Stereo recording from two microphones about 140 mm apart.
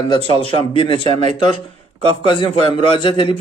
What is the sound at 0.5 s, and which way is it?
Speech, 40° left (ahead or behind).